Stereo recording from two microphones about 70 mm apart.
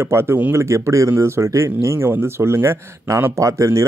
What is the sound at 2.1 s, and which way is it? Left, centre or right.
Speech, right.